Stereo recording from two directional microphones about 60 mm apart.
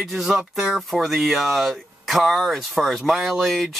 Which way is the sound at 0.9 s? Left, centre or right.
Centre.